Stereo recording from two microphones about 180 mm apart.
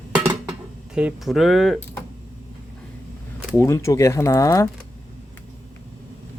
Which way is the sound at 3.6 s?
15° left (ahead or behind).